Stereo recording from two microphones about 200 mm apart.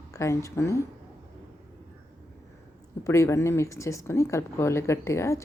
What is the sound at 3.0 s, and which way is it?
Speech, 15° left (ahead or behind).